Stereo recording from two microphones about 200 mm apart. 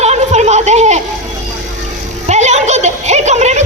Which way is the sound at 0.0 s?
35° right (ahead or behind).